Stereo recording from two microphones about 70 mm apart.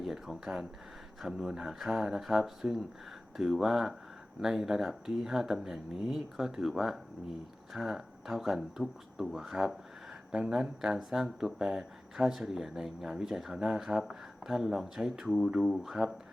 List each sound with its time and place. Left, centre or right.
0.0 s speech: centre